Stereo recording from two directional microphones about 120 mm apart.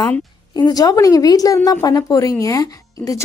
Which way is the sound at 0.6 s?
35° left (ahead or behind).